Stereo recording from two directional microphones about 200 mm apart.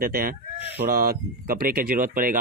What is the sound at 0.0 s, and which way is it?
Speech, 45° right (ahead or behind).